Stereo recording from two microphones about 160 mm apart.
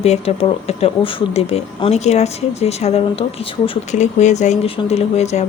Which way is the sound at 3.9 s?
50° left (ahead or behind).